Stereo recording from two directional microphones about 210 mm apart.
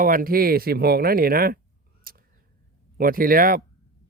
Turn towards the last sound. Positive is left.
turn(degrees=-45)  # may be behind; listen again after turning